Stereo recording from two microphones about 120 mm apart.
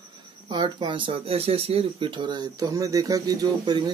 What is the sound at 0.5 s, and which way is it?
Speech, 40° right (ahead or behind).